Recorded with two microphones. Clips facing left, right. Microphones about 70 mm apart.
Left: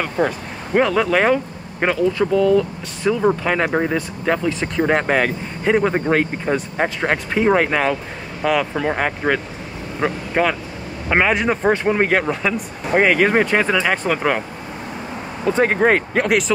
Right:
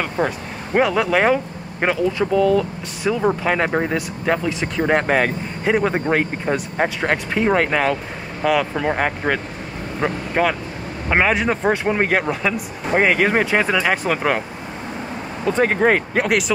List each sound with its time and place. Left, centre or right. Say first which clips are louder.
0.2 s speech: left 3 dB; centre
15.4 s speech: left 1 dB; centre